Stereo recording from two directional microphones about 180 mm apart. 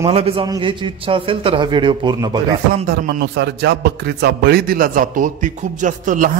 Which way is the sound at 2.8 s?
65° right (ahead or behind).